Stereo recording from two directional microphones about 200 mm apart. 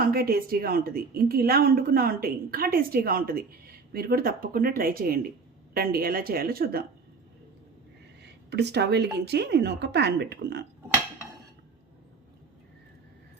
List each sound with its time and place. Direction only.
0.0 s a woman's voice: 50° right (ahead or behind)
8.2 s speech: 55° right (ahead or behind)